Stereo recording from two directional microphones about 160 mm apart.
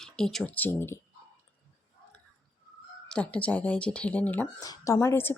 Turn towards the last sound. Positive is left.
turn(degrees=15)  # may be behind; listen again after turning